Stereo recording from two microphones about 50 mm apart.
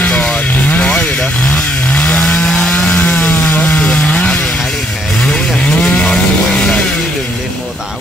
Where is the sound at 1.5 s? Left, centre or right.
Left.